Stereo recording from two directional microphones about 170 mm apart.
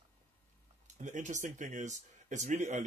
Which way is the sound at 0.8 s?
45° right (ahead or behind).